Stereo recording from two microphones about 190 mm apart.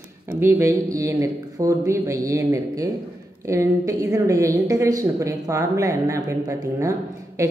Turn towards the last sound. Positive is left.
turn(degrees=-15)  # may be behind; listen again after turning